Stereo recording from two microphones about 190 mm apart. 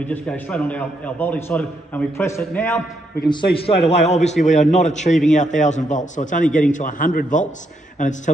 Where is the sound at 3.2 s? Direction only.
25° left (ahead or behind).